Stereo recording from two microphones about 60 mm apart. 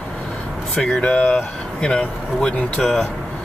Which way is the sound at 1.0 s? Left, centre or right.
Centre.